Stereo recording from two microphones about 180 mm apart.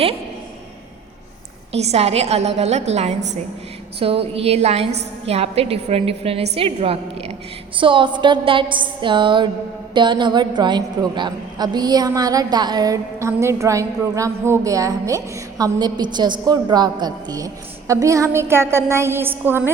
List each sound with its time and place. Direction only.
1.7 s a woman's voice: 35° right (ahead or behind); by 19.7 s 10° right (ahead or behind)